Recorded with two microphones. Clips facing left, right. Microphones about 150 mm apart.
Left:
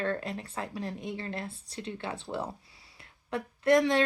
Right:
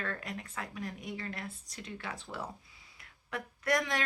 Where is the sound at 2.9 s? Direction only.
25° left (ahead or behind).